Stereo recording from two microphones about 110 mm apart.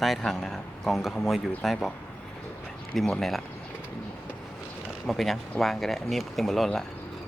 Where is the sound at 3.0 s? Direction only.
5° left (ahead or behind).